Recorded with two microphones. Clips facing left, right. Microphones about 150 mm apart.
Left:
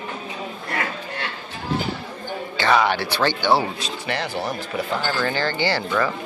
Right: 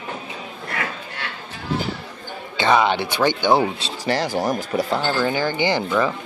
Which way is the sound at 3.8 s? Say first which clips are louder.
Right 4 dB; 35° right (ahead or behind).